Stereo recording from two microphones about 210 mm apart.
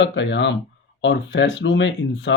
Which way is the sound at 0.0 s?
60° left (ahead or behind).